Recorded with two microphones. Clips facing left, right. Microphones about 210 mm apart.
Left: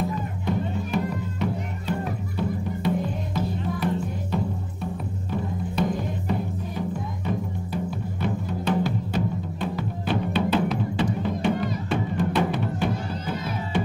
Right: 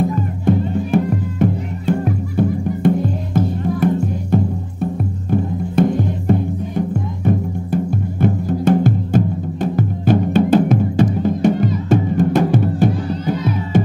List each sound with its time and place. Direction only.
0.1 s music: 50° right (ahead or behind)